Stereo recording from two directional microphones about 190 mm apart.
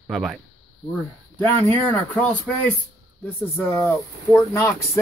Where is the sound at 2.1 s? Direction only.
5° left (ahead or behind).